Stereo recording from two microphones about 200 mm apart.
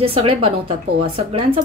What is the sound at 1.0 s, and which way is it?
Speech, 30° right (ahead or behind).